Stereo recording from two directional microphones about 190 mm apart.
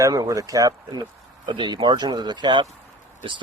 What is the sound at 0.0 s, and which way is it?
Speech, 15° right (ahead or behind).